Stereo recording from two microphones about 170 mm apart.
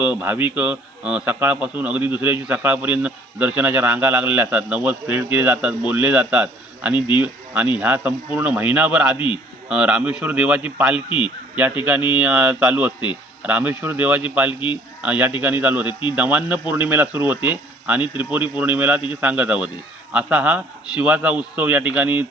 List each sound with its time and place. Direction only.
0.0 s a man's voice: 10° right (ahead or behind)
9.1 s a man's voice: 30° left (ahead or behind)
9.6 s a man's voice: 5° right (ahead or behind)
15.9 s a man's voice: 30° left (ahead or behind)
16.1 s a man's voice: 10° right (ahead or behind)